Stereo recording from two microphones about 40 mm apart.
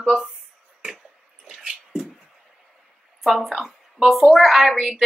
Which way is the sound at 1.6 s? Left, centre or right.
Centre.